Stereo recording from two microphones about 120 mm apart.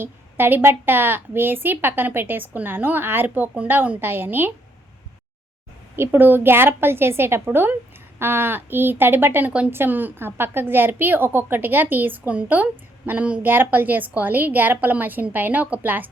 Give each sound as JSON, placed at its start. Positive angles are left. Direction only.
{"t": 0.0, "sound": "a woman's voice", "side_deg": -20}
{"t": 6.0, "sound": "a woman's voice", "side_deg": -15}